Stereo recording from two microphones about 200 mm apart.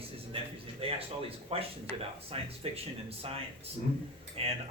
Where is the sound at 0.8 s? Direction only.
30° right (ahead or behind).